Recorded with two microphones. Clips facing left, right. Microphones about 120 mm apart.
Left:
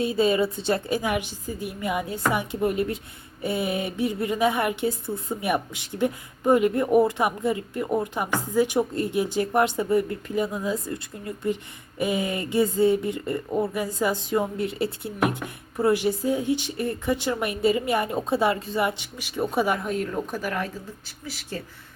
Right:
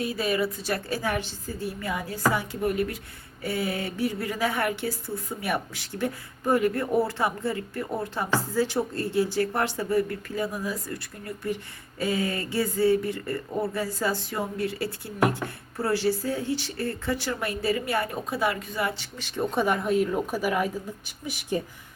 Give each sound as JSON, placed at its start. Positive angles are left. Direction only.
{"t": 0.0, "sound": "a woman's voice", "side_deg": 25}